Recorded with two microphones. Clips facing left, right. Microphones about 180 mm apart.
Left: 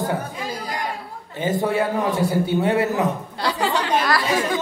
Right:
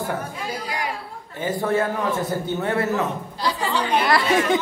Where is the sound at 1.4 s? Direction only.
20° left (ahead or behind).